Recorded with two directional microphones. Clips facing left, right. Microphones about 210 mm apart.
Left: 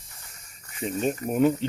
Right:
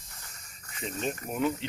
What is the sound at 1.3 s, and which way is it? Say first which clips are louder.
Speech: left 8 dB; 40° left (ahead or behind).